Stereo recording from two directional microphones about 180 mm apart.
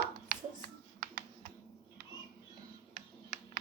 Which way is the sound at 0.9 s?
55° right (ahead or behind).